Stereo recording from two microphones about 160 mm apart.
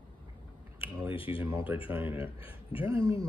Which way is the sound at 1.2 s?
10° right (ahead or behind).